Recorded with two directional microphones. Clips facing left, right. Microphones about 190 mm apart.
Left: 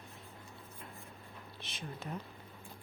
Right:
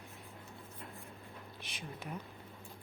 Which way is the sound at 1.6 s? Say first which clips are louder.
Left 2 dB; 10° right (ahead or behind).